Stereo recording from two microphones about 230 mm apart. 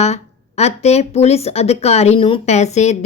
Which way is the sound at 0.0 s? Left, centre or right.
Left.